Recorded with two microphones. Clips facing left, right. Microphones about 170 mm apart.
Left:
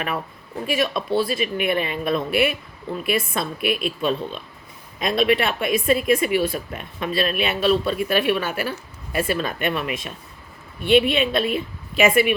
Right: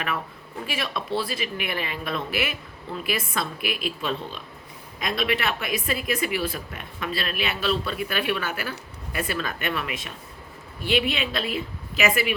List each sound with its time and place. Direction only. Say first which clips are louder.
0.8 s speech: left 6 dB; 25° left (ahead or behind)